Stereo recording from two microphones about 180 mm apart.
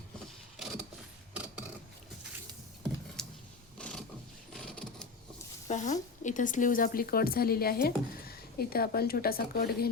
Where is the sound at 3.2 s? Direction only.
5° left (ahead or behind).